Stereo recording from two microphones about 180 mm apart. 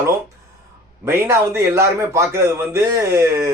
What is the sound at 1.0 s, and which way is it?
Speech, 15° right (ahead or behind).